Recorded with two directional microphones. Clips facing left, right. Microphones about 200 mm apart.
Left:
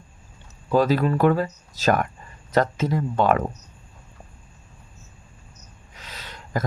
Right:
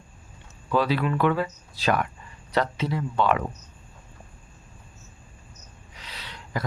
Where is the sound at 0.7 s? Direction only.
45° left (ahead or behind).